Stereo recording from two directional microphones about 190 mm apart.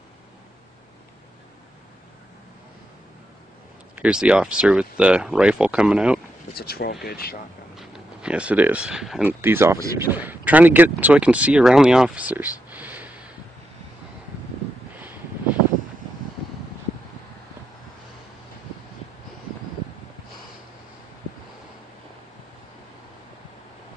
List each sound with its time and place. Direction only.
3.9 s speech: 5° right (ahead or behind)
6.5 s speech: 55° left (ahead or behind)
7.7 s speech: centre (ahead or behind)